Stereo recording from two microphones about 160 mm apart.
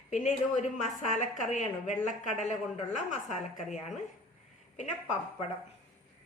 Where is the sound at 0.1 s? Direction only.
50° left (ahead or behind).